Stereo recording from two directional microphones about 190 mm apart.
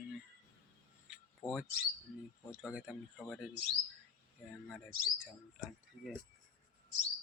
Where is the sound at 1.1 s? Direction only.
5° right (ahead or behind).